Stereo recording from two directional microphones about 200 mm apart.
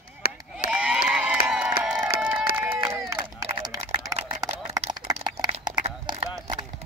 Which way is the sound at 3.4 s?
30° right (ahead or behind).